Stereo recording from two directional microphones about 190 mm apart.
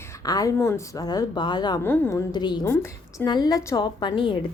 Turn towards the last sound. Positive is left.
turn(degrees=25)  # may be behind; listen again after turning